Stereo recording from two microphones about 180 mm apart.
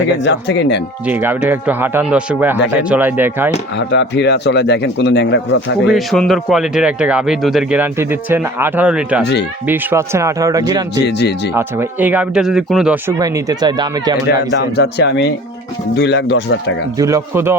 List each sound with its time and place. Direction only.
0.2 s speech: 80° left
1.0 s speech: 10° right (ahead or behind)
3.8 s a man's voice: 75° left (ahead or behind)
5.9 s speech: centre (ahead or behind)
9.2 s a man's voice: 70° left (ahead or behind)
9.6 s speech: 15° right (ahead or behind)
10.9 s a man's voice: 70° left (ahead or behind)
11.5 s speech: 10° right (ahead or behind)
13.1 s speech: 20° right (ahead or behind)
14.3 s a man's voice: 70° left (ahead or behind)
17.0 s speech: 15° right (ahead or behind)